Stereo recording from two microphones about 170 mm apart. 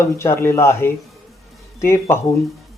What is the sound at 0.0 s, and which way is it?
Speech, 15° left (ahead or behind).